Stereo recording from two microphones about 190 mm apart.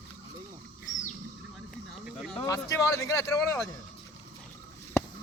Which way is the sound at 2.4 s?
20° left (ahead or behind).